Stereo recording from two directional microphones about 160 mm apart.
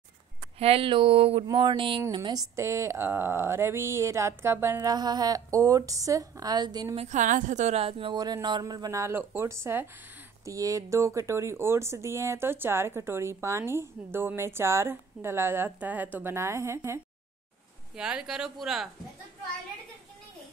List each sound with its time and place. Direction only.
0.6 s speech: 35° right (ahead or behind)
7.0 s speech: 50° right (ahead or behind); by 17.0 s 15° right (ahead or behind)
17.9 s speech: 5° right (ahead or behind)